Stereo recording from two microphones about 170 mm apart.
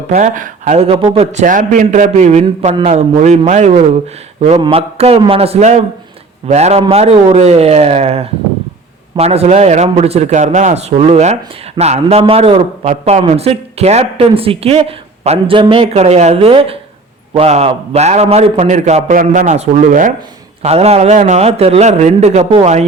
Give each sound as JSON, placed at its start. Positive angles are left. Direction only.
{"t": 0.1, "sound": "a man's voice", "side_deg": -50}
{"t": 20.6, "sound": "a man's voice", "side_deg": -40}